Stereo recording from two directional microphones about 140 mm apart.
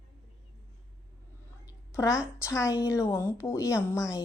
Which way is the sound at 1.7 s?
20° left (ahead or behind).